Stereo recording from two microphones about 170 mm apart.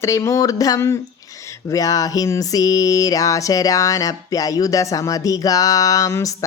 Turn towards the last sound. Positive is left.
turn(degrees=20)  # may be behind; listen again after turning